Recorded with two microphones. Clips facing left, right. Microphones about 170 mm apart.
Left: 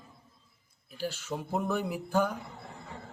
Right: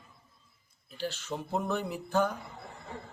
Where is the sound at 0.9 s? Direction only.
10° left (ahead or behind).